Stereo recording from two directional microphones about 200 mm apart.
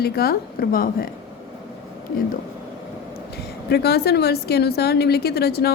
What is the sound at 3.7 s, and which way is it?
A woman's voice, 55° left (ahead or behind).